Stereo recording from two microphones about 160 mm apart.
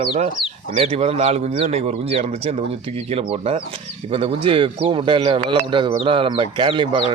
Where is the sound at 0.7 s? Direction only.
35° right (ahead or behind).